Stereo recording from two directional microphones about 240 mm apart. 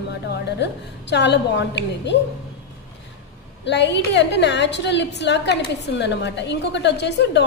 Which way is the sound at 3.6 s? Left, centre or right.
Left.